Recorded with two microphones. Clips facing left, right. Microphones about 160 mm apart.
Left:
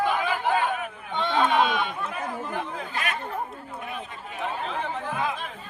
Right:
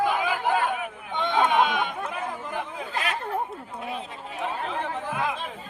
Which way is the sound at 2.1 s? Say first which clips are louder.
Left 1 dB; 15° right (ahead or behind).